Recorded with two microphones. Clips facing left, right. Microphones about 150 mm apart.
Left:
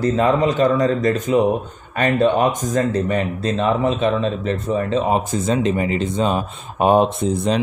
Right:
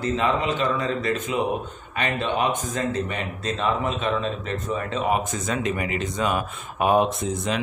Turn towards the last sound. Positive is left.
turn(degrees=30)  # may be behind; listen again after turning